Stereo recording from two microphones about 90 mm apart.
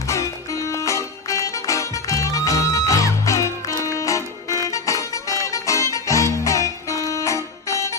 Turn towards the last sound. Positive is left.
turn(degrees=35)  # may be behind; listen again after turning